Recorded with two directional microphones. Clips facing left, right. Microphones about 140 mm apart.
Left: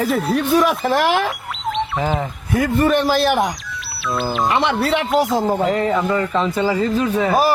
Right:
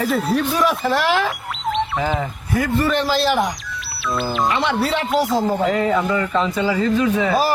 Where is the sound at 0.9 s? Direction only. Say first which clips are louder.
Left 2 dB; 50° left (ahead or behind).